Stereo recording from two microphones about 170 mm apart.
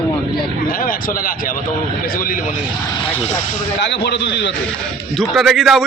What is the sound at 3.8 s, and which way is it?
Speech, 85° left.